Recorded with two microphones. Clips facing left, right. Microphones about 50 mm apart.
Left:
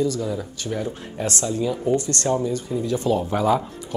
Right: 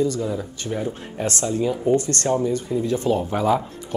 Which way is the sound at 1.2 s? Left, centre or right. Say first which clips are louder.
Right 1 dB; right.